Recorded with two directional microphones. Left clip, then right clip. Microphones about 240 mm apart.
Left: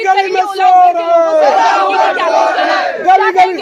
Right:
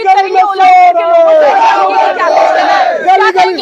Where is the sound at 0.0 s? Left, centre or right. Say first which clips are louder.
Right 4 dB; centre.